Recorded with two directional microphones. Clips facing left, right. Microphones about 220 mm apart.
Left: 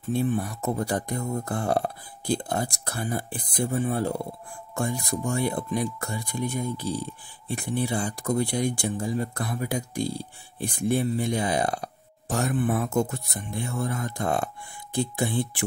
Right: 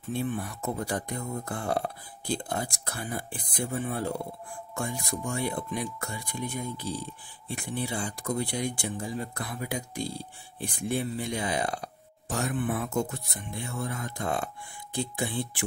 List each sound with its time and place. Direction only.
0.1 s speech: 40° left (ahead or behind)